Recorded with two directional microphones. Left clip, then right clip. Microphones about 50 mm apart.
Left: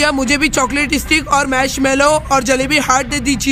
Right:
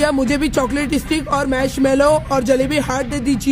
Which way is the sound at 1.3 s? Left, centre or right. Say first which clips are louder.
Left 1 dB; centre.